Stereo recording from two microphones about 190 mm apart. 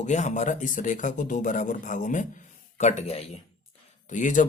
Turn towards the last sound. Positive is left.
turn(degrees=40)  # may be behind; listen again after turning